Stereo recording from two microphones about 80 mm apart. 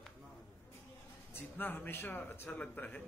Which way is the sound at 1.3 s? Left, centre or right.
Left.